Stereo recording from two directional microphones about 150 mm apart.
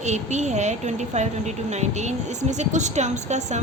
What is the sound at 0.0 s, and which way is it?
A woman's voice, 50° right (ahead or behind).